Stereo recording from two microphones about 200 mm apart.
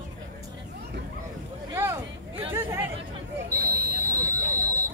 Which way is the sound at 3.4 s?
45° right (ahead or behind).